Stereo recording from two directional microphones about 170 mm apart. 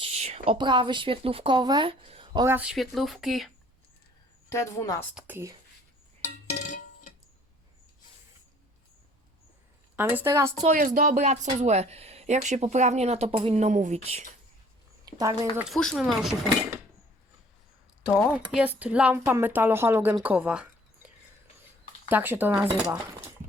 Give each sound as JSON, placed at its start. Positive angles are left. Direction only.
{"t": 0.0, "sound": "speech", "side_deg": -35}
{"t": 2.5, "sound": "speech", "side_deg": -5}
{"t": 4.4, "sound": "a woman's voice", "side_deg": 15}
{"t": 5.1, "sound": "speech", "side_deg": -10}
{"t": 6.2, "sound": "music", "side_deg": 50}
{"t": 9.9, "sound": "speech", "side_deg": -10}
{"t": 10.6, "sound": "speech", "side_deg": -45}
{"t": 15.0, "sound": "speech", "side_deg": -20}
{"t": 15.6, "sound": "speech", "side_deg": 0}
{"t": 18.0, "sound": "speech", "side_deg": -5}
{"t": 22.1, "sound": "speech", "side_deg": -10}